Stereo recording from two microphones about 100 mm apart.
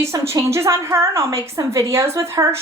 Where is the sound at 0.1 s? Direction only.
30° right (ahead or behind).